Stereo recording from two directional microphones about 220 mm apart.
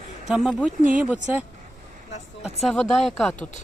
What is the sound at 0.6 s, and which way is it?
Speech, 35° right (ahead or behind).